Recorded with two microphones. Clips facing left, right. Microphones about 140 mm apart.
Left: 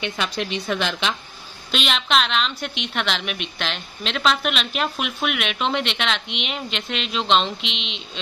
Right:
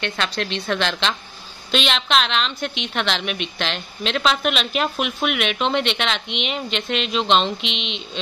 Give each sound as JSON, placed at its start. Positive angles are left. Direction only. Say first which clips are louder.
{"t": 0.0, "sound": "a woman's voice", "louder": "right 1 dB", "side_deg": 10}